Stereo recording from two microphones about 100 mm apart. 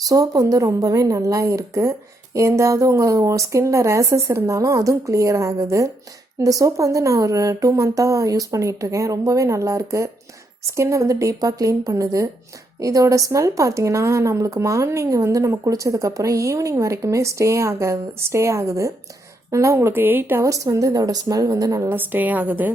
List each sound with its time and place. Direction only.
0.0 s speech: 35° right (ahead or behind)
21.8 s a woman's voice: 20° right (ahead or behind)